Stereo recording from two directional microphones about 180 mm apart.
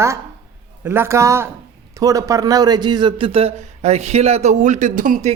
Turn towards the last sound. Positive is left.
turn(degrees=-45)  # may be behind; listen again after turning